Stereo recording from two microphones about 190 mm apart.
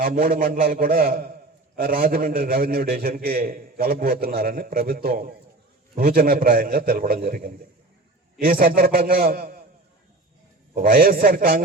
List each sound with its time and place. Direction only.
0.0 s a man's voice: 50° right (ahead or behind)
10.8 s a man's voice: 50° right (ahead or behind)